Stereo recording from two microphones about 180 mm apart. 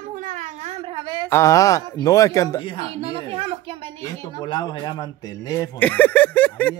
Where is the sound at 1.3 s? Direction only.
20° left (ahead or behind).